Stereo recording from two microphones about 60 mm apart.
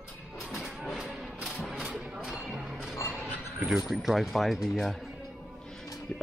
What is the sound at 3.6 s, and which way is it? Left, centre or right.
Speech, centre.